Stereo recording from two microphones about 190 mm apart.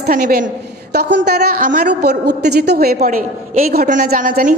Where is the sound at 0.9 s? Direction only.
60° right (ahead or behind).